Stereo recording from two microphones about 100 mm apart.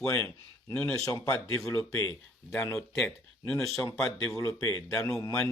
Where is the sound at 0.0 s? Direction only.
15° left (ahead or behind).